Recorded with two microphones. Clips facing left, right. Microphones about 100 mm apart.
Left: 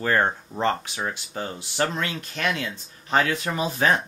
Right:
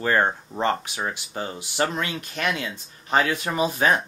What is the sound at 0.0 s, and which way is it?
Speech, 10° right (ahead or behind).